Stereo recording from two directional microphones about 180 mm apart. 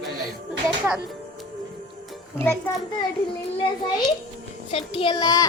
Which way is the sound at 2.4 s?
10° left (ahead or behind).